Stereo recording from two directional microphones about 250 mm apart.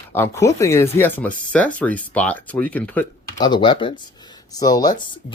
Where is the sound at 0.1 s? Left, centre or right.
Centre.